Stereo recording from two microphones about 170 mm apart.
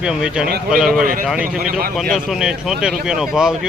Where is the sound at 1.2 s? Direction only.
5° right (ahead or behind).